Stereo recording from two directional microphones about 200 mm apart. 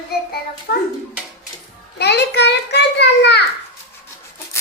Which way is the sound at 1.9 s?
55° left (ahead or behind).